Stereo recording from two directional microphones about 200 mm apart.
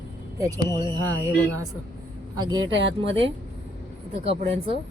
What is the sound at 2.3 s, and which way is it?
Speech, 20° right (ahead or behind).